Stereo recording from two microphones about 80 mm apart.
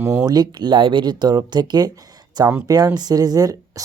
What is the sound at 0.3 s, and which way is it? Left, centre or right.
Speech, right.